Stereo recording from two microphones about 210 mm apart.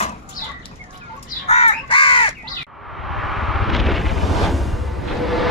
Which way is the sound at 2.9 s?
Centre (ahead or behind).